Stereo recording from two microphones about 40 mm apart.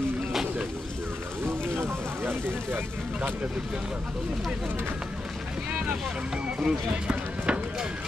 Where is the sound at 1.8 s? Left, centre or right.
Right.